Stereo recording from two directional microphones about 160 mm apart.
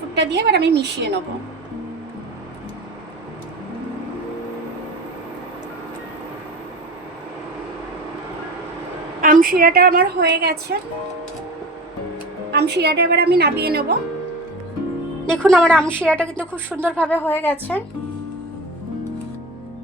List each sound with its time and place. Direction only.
0.1 s a woman's voice: 90° right
9.2 s a woman's voice: 60° right (ahead or behind)
12.5 s a woman's voice: 90° right
15.3 s a woman's voice: 5° left (ahead or behind)
16.6 s speech: 10° right (ahead or behind)
17.0 s a woman's voice: 10° left (ahead or behind)